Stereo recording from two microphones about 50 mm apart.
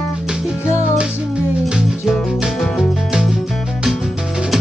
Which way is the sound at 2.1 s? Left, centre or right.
Centre.